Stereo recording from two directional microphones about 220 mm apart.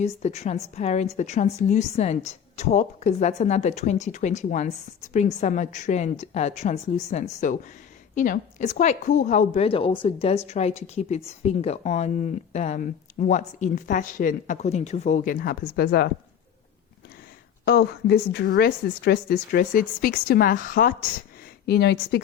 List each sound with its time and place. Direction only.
0.0 s a woman's voice: 30° left (ahead or behind)
17.7 s speech: 45° left (ahead or behind)